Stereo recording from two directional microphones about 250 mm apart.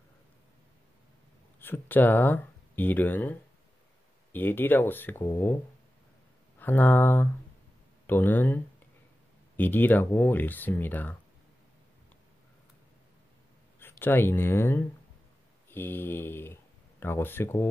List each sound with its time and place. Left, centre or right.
1.6 s speech: centre
6.6 s speech: centre
13.7 s speech: centre